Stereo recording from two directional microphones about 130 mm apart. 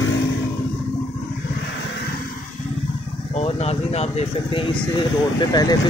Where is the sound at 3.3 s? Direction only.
55° left (ahead or behind); by 5.8 s 30° left (ahead or behind).